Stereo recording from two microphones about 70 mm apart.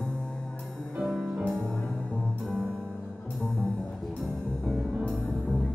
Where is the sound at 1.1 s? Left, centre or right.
Centre.